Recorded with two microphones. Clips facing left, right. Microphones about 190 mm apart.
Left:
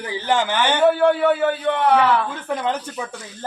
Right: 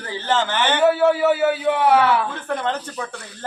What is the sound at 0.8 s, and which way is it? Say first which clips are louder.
A man's voice: even; 5° right (ahead or behind).